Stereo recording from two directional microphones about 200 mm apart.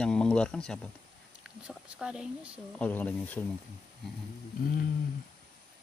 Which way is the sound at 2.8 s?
10° left (ahead or behind).